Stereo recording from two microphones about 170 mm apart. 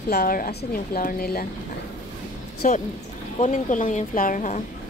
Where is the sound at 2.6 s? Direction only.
50° left (ahead or behind).